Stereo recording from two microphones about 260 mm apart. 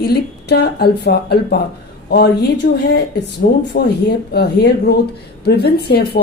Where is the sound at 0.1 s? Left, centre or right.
Left.